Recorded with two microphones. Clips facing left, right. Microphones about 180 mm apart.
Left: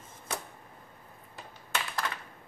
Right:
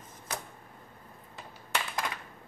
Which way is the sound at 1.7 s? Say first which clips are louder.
Right 1 dB; 15° right (ahead or behind).